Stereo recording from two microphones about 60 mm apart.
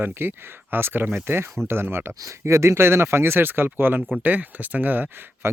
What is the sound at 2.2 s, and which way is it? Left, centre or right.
Speech, right.